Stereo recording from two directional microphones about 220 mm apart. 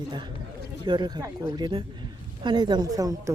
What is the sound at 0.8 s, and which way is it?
Speech, 20° right (ahead or behind).